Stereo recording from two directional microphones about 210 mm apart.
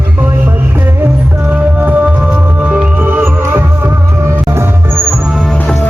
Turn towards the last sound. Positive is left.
turn(degrees=0)  # may be behind; listen again after turning